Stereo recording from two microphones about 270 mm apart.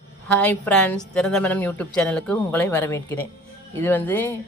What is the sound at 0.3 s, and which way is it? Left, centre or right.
A woman's voice, centre.